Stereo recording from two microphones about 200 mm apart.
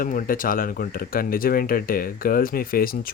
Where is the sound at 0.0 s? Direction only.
40° left (ahead or behind).